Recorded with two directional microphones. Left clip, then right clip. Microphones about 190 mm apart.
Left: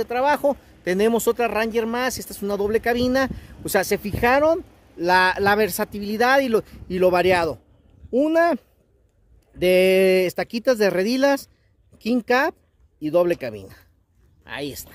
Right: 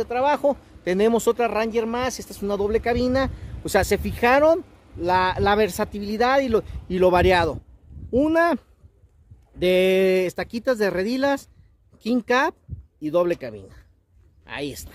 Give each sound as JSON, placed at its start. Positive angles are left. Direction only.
{"t": 0.0, "sound": "speech", "side_deg": 10}
{"t": 3.4, "sound": "speech", "side_deg": 0}
{"t": 4.9, "sound": "a man's voice", "side_deg": 15}
{"t": 14.4, "sound": "speech", "side_deg": 5}